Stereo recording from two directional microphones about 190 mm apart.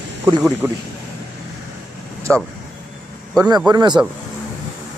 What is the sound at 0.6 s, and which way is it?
Speech, 10° right (ahead or behind).